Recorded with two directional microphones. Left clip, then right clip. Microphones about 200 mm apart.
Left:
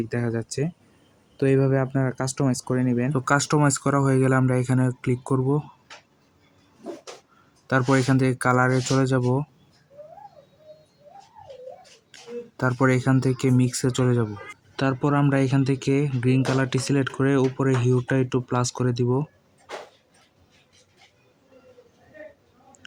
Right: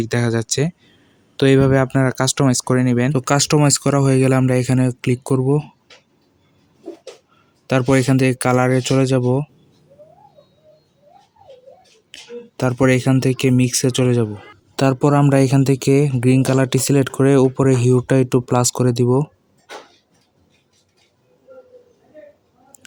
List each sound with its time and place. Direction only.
0.0 s speech: 50° right (ahead or behind)
7.7 s speech: 45° right (ahead or behind)
12.5 s speech: 40° right (ahead or behind)
14.8 s speech: 50° right (ahead or behind)